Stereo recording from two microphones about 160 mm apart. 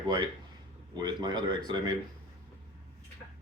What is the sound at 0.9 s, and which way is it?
Cutlery, 25° right (ahead or behind).